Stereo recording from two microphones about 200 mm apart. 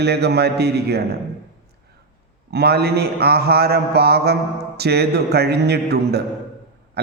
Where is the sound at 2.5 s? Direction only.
55° right (ahead or behind).